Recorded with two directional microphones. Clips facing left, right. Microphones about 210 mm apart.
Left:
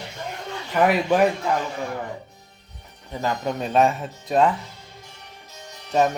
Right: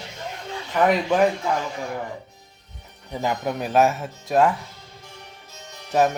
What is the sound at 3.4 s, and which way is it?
Music, 5° right (ahead or behind).